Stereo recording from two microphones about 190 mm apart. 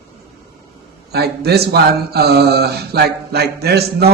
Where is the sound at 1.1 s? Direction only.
55° right (ahead or behind).